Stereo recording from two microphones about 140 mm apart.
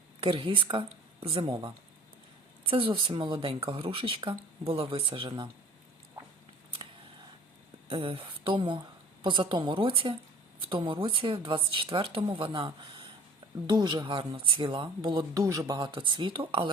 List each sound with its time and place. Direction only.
0.2 s speech: 35° right (ahead or behind)
7.9 s a woman's voice: 40° right (ahead or behind)